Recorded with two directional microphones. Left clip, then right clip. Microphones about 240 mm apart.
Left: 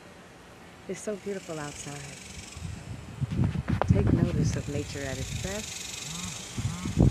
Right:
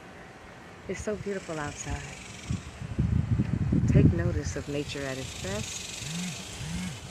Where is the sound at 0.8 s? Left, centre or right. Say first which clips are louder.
Right 1 dB; centre.